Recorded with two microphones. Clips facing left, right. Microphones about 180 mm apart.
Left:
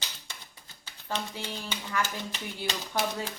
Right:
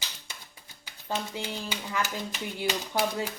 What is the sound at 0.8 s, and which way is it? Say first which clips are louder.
Speech: right 2 dB; 15° right (ahead or behind).